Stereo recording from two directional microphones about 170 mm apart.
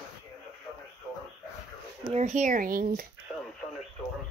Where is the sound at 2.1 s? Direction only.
40° right (ahead or behind).